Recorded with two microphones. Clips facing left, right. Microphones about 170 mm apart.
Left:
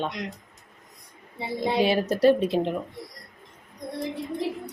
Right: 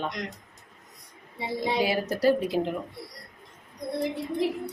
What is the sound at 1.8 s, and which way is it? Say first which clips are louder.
Speech: left 6 dB; 25° left (ahead or behind).